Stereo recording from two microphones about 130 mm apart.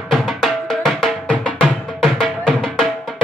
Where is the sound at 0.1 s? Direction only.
5° left (ahead or behind).